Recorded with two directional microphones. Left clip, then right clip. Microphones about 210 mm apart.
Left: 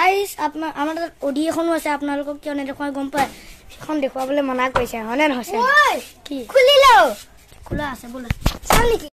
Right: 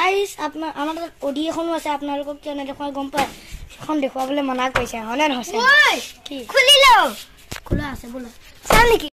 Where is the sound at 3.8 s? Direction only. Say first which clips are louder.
Even; 15° right (ahead or behind).